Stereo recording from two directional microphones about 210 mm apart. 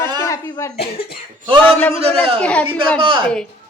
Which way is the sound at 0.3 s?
15° left (ahead or behind).